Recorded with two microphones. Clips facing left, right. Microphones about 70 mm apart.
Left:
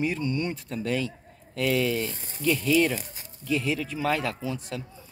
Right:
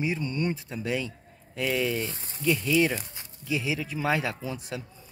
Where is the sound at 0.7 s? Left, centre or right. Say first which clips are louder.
Left 2 dB; centre.